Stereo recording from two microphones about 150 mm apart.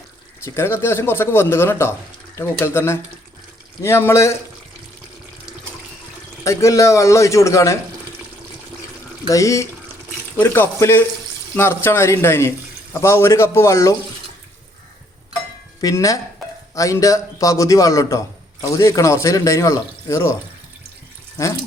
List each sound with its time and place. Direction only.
0.4 s speech: 15° left (ahead or behind)
6.4 s speech: 20° left (ahead or behind)
9.2 s speech: 20° left (ahead or behind)
15.8 s speech: 20° left (ahead or behind)
21.3 s speech: 20° left (ahead or behind)